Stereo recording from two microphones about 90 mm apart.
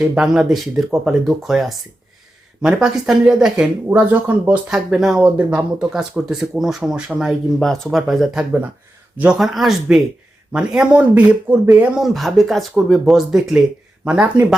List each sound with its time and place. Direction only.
0.0 s speech: 10° right (ahead or behind)
3.8 s speech: 20° right (ahead or behind)
4.7 s speech: 5° right (ahead or behind)
5.2 s speech: 15° right (ahead or behind)
11.9 s speech: centre (ahead or behind)